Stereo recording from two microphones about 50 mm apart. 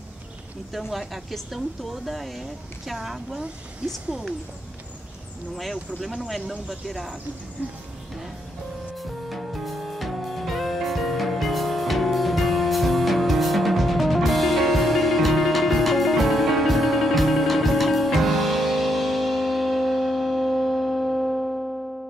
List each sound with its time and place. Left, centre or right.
0.7 s speech: centre
3.8 s speech: centre
5.6 s speech: centre
8.9 s music: centre